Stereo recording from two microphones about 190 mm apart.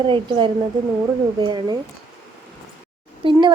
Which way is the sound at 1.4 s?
20° right (ahead or behind).